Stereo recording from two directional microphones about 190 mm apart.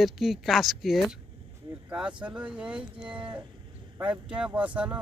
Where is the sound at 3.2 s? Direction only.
25° right (ahead or behind).